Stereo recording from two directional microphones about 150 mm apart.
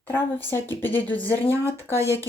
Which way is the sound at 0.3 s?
15° left (ahead or behind).